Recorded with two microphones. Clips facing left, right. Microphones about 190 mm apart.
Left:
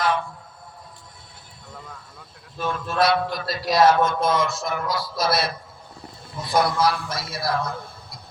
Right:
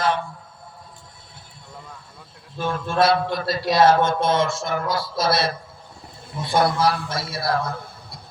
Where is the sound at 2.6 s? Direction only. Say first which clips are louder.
Right 2 dB; 30° right (ahead or behind).